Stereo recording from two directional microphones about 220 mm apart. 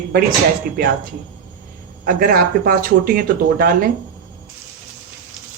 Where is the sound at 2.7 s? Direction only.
40° right (ahead or behind).